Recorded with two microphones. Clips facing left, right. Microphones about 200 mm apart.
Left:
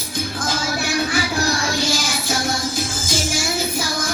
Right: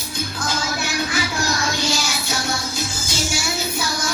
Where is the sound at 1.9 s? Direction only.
50° left (ahead or behind).